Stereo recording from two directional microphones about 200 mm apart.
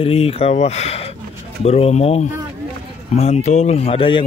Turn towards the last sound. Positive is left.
turn(degrees=25)  # may be behind; listen again after turning